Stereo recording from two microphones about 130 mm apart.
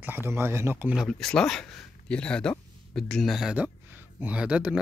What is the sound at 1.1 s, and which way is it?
Speech, 5° left (ahead or behind).